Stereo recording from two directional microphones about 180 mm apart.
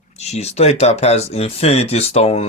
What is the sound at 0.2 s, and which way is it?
Speech, 35° left (ahead or behind).